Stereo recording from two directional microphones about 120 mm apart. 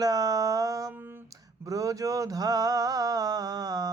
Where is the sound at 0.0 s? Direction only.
30° right (ahead or behind).